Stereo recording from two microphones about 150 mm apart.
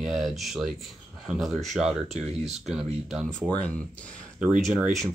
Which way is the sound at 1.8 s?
45° right (ahead or behind).